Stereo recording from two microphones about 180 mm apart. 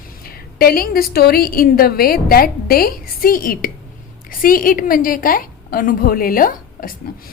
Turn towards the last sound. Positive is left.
turn(degrees=50)  # may be behind; listen again after turning